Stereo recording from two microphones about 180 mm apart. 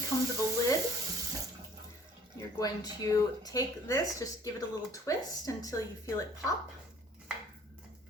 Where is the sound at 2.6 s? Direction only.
20° left (ahead or behind).